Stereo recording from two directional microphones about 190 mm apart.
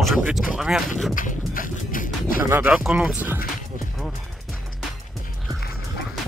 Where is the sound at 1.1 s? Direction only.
45° left (ahead or behind).